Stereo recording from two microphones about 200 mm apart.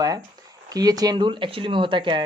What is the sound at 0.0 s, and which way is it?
Speech, 20° right (ahead or behind).